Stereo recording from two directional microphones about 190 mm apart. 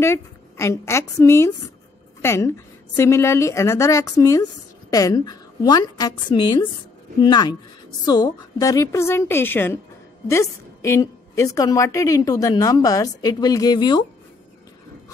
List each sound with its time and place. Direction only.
0.0 s a woman's voice: 15° left (ahead or behind)